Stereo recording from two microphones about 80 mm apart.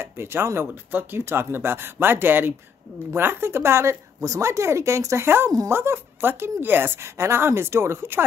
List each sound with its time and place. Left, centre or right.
0.0 s a woman's voice: right